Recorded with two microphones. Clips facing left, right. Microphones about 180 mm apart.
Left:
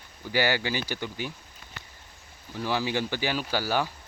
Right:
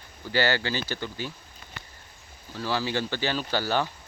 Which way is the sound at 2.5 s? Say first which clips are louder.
Even; 15° left (ahead or behind).